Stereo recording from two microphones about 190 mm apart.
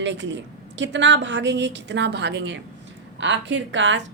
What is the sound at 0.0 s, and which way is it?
A woman's voice, 75° right (ahead or behind).